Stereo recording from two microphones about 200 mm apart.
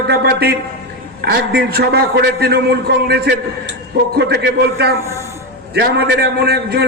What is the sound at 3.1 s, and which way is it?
Speech, 55° right (ahead or behind).